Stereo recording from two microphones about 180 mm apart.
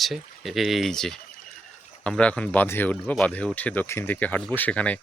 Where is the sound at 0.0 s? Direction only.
Centre (ahead or behind).